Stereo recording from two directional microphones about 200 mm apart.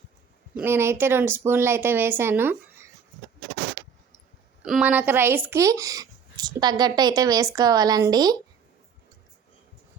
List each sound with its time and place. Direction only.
0.6 s speech: 10° right (ahead or behind)
3.8 s vehicle: 55° right (ahead or behind)
4.6 s speech: 5° right (ahead or behind); by 8.4 s 20° right (ahead or behind)